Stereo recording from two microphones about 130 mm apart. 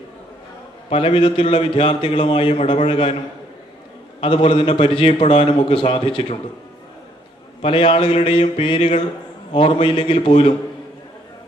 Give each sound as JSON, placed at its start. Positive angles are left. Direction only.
{"t": 0.9, "sound": "a man's voice", "side_deg": 45}
{"t": 4.2, "sound": "a man's voice", "side_deg": 45}
{"t": 7.6, "sound": "a man's voice", "side_deg": 45}